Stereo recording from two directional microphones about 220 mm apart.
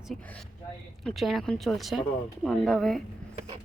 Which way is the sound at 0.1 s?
5° left (ahead or behind).